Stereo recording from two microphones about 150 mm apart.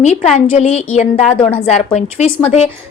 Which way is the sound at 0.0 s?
50° left (ahead or behind).